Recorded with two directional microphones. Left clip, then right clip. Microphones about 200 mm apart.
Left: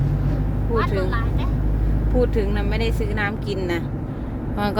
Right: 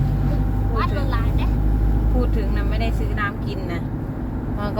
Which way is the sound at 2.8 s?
55° left (ahead or behind).